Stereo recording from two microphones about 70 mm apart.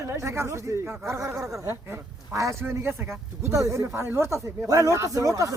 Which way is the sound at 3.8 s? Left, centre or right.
Right.